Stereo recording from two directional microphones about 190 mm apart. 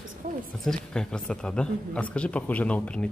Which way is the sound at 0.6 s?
5° left (ahead or behind).